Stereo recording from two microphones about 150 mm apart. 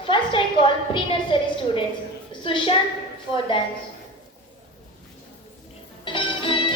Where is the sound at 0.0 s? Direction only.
35° left (ahead or behind).